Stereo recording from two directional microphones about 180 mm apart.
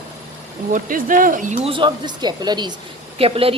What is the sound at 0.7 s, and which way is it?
Speech, 50° right (ahead or behind).